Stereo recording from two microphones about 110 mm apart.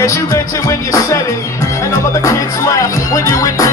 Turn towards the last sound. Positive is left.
turn(degrees=30)  # may be behind; listen again after turning